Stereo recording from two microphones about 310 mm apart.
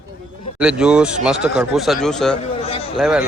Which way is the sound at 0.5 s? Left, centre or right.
Centre.